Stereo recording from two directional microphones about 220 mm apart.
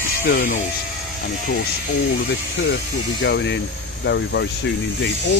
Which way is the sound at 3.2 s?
55° left (ahead or behind).